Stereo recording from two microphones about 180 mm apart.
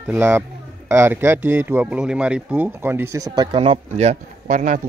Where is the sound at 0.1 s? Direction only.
10° right (ahead or behind).